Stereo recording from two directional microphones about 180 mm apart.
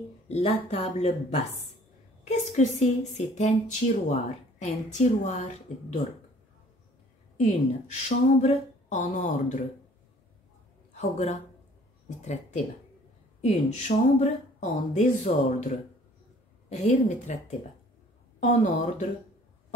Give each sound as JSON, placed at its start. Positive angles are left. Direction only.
{"t": 0.3, "sound": "speech", "side_deg": 35}
{"t": 7.3, "sound": "a woman's voice", "side_deg": 40}
{"t": 11.0, "sound": "speech", "side_deg": 40}